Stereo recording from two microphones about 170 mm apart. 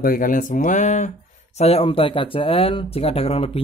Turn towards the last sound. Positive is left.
turn(degrees=35)  # may be behind; listen again after turning